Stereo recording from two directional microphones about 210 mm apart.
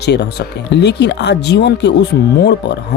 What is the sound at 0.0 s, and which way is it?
Speech, 55° left (ahead or behind).